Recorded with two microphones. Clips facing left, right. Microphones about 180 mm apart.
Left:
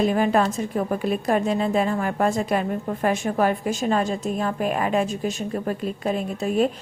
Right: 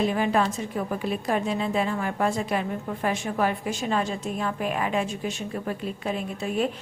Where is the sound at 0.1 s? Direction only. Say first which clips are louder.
Left 4 dB; 45° left (ahead or behind).